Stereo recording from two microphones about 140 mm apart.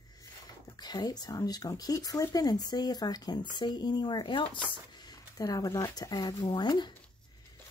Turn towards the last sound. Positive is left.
turn(degrees=30)  # may be behind; listen again after turning